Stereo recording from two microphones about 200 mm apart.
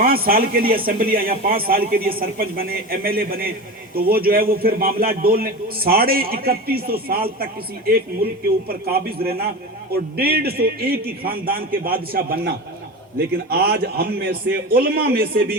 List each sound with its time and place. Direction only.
0.0 s a man's voice: 45° right (ahead or behind)
8.6 s a man's voice: 50° right (ahead or behind)